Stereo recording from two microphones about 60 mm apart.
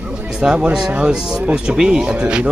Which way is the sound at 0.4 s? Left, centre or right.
Centre.